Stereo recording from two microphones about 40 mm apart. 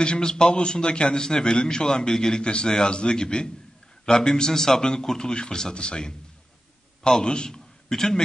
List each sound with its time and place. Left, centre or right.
0.0 s a man's voice: centre